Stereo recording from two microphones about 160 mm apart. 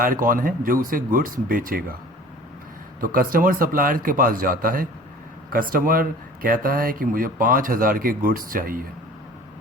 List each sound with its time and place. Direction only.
0.0 s speech: 60° right (ahead or behind)
3.0 s speech: 60° right (ahead or behind)